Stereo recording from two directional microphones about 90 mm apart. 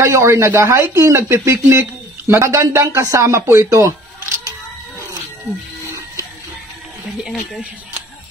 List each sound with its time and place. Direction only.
0.0 s speech: 30° right (ahead or behind)